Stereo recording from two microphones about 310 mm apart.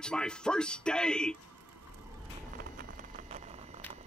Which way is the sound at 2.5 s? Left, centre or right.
Right.